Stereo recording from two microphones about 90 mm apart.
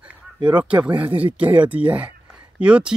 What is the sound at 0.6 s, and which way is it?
Speech, 15° right (ahead or behind).